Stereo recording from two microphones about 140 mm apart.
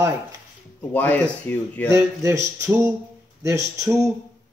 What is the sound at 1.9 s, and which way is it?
Speech, 20° right (ahead or behind).